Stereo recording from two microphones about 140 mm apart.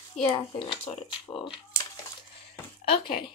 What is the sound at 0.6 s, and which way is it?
Speech, 35° left (ahead or behind).